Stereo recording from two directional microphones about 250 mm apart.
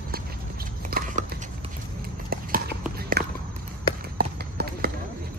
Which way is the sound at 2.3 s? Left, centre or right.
Right.